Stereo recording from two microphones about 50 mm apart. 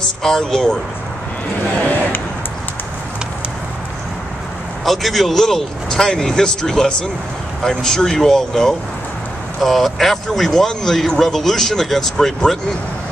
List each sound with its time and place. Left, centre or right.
0.0 s a man's voice: centre
1.8 s a sound: left
4.8 s a man's voice: centre